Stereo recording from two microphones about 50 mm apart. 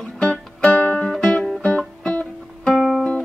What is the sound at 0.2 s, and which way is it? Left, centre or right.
Music, left.